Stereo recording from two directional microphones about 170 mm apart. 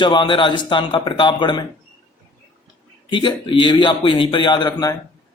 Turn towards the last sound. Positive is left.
turn(degrees=25)  # may be behind; listen again after turning